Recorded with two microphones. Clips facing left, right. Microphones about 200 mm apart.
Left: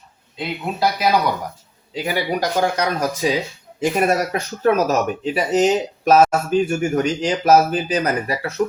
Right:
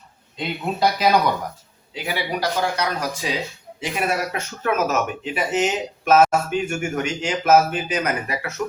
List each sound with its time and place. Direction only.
0.3 s speech: 5° left (ahead or behind)
1.9 s speech: 45° left (ahead or behind)